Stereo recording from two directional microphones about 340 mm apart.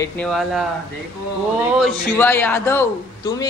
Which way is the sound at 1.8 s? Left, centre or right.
Centre.